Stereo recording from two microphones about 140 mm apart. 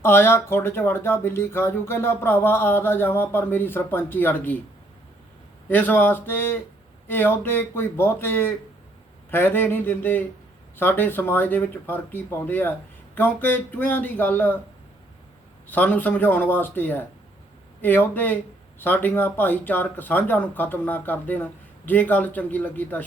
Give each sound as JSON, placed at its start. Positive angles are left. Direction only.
{"t": 0.0, "sound": "speech", "side_deg": 15}
{"t": 5.6, "sound": "speech", "side_deg": 15}
{"t": 15.7, "sound": "speech", "side_deg": 10}